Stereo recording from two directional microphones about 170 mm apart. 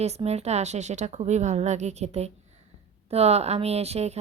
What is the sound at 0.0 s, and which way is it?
A woman's voice, 40° right (ahead or behind).